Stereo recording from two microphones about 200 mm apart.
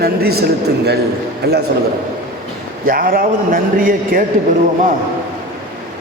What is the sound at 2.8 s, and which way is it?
A man's voice, 45° right (ahead or behind).